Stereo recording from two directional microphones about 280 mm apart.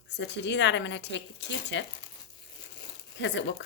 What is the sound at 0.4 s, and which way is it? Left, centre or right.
A woman's voice, left.